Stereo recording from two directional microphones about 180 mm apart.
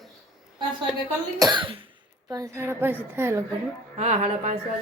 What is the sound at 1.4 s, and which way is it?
Cough, 25° right (ahead or behind).